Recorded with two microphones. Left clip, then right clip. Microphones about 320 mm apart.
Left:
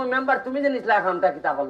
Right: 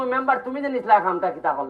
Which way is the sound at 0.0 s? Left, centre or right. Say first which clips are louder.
Right 1 dB; centre.